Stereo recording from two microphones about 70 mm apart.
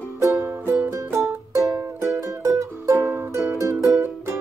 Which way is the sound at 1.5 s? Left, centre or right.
Right.